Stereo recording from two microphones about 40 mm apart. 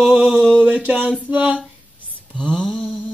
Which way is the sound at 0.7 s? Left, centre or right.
Right.